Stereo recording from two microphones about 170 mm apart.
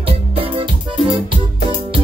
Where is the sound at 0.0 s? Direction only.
30° right (ahead or behind).